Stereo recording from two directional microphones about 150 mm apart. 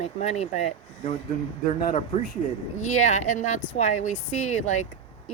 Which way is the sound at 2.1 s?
45° left (ahead or behind).